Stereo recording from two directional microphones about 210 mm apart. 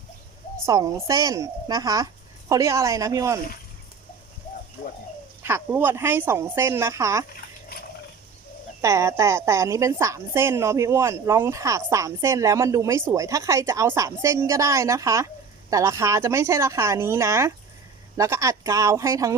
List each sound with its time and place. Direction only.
0.6 s a woman's voice: 15° right (ahead or behind)
5.4 s a woman's voice: 10° right (ahead or behind)
8.8 s a woman's voice: 15° right (ahead or behind)